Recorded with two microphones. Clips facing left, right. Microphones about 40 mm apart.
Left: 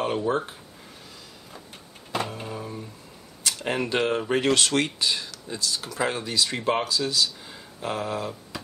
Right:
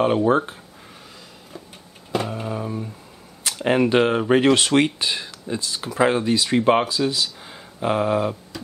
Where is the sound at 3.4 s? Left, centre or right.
Right.